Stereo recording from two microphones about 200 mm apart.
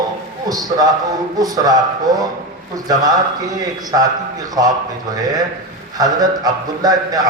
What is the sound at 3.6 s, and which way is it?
Speech, 20° right (ahead or behind).